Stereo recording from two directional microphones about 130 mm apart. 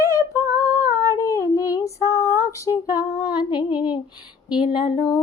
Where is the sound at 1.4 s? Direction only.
25° left (ahead or behind).